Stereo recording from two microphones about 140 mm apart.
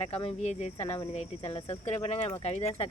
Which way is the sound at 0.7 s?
35° left (ahead or behind).